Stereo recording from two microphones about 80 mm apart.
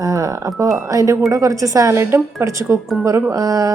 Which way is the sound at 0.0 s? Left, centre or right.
Right.